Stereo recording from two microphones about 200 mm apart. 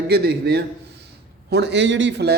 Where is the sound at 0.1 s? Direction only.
55° right (ahead or behind).